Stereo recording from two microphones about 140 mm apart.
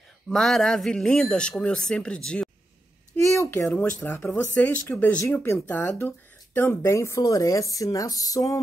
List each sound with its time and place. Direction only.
0.3 s a man's voice: centre (ahead or behind)
3.2 s a sound: 20° left (ahead or behind)
4.0 s speech: 15° left (ahead or behind)